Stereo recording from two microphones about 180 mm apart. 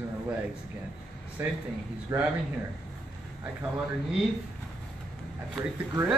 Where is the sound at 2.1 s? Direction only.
20° right (ahead or behind).